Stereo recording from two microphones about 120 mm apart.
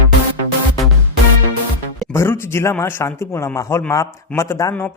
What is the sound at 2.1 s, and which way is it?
Speech, 20° left (ahead or behind).